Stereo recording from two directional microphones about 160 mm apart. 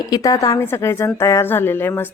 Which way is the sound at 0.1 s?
20° left (ahead or behind).